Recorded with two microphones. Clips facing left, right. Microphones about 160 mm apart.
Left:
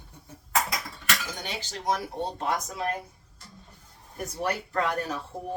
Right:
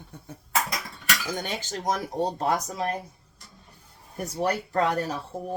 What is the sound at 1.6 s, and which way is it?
Speech, 45° right (ahead or behind).